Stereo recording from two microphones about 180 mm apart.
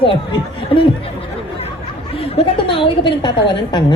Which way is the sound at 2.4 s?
30° left (ahead or behind).